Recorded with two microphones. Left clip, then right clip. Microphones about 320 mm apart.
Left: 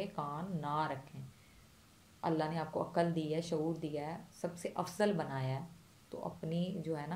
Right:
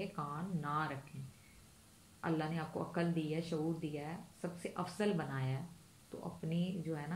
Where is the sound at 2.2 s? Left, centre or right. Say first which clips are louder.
Left 4 dB; centre.